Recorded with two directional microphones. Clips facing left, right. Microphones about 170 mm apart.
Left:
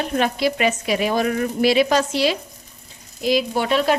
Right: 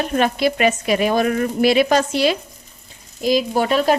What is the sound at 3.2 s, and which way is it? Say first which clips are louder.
Speech: right 2 dB; 45° right (ahead or behind).